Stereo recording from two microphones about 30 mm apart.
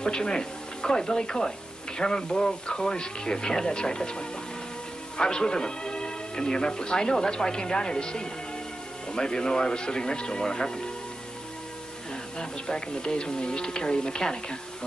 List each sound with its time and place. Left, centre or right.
0.0 s a man's voice: left
12.4 s a man's voice: left